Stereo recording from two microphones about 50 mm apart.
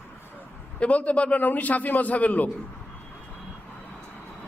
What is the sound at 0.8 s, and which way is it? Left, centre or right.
A man's voice, left.